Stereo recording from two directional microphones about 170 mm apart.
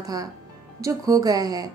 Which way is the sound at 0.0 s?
20° right (ahead or behind).